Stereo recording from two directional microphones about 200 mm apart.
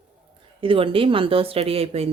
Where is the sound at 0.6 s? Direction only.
25° right (ahead or behind).